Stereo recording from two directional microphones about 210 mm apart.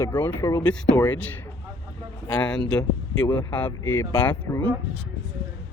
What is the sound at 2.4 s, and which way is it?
Speech, 5° left (ahead or behind).